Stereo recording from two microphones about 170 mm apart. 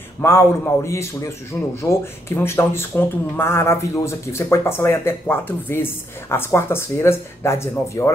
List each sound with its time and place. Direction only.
0.2 s speech: 15° left (ahead or behind)